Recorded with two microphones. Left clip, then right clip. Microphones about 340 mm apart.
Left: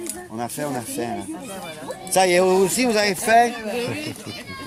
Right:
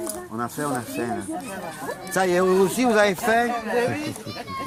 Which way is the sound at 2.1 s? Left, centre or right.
Left.